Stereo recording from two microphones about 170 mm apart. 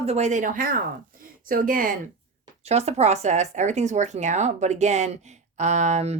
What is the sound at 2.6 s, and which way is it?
Speech, 40° right (ahead or behind).